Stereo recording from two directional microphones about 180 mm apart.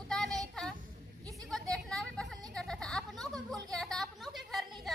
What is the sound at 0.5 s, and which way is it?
Child singing, 5° left (ahead or behind).